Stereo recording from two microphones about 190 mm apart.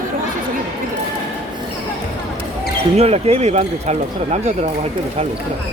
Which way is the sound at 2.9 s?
35° right (ahead or behind).